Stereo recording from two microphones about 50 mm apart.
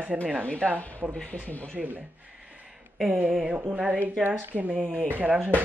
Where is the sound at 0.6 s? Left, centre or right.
Left.